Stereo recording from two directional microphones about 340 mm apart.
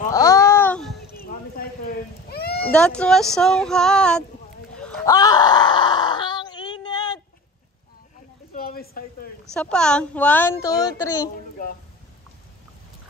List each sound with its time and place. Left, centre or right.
0.1 s babbling: centre
1.1 s a sound: left
2.7 s speech: centre
4.7 s groan: centre
8.5 s a sound: left
9.5 s speech: centre